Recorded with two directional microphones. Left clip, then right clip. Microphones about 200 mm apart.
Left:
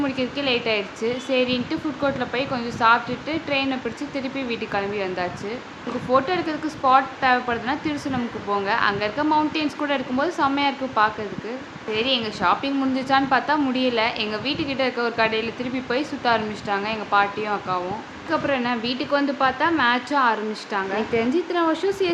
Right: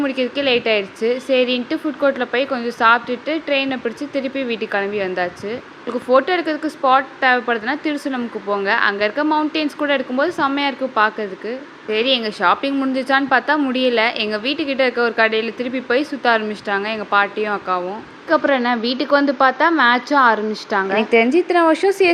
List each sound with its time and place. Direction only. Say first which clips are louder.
0.0 s a woman's voice: right 5 dB; 25° right (ahead or behind)
18.3 s a woman's voice: right 7 dB; 35° right (ahead or behind)